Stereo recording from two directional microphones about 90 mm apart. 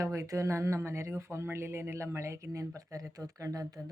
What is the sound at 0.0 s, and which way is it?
Speech, 35° right (ahead or behind).